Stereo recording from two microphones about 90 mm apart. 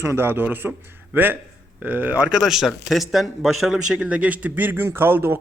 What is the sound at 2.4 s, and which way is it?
A man's voice, 5° right (ahead or behind).